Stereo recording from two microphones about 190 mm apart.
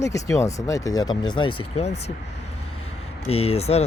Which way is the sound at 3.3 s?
30° left (ahead or behind).